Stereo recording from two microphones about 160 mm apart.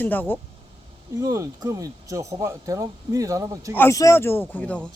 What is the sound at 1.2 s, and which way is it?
Speech, 20° right (ahead or behind).